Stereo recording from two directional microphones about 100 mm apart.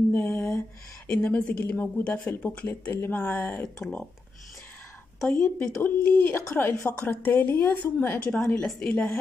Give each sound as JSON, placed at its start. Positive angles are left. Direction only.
{"t": 0.1, "sound": "a sound", "side_deg": 15}
{"t": 1.0, "sound": "speech", "side_deg": 15}
{"t": 3.6, "sound": "speech", "side_deg": 5}
{"t": 5.2, "sound": "speech", "side_deg": 10}